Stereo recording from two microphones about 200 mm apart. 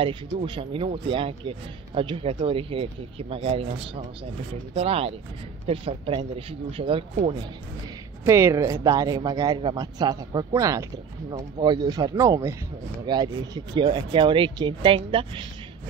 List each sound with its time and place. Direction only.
0.0 s speech: 25° right (ahead or behind)
8.3 s speech: 15° right (ahead or behind)